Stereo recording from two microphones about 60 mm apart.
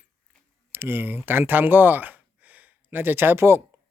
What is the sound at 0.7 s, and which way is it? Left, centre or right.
Speech, right.